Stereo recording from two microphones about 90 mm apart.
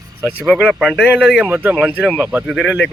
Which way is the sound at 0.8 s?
Centre (ahead or behind).